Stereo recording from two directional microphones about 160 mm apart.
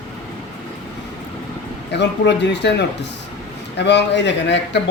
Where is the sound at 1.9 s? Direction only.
90° left.